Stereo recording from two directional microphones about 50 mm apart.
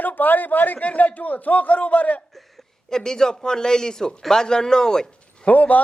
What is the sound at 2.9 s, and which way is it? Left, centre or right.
A man's voice, centre.